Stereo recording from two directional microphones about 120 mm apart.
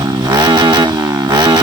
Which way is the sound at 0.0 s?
35° right (ahead or behind).